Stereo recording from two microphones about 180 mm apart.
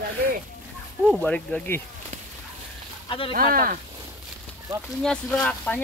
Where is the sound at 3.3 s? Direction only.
50° right (ahead or behind).